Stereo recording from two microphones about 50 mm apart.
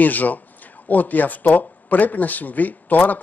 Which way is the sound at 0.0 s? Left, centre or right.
Left.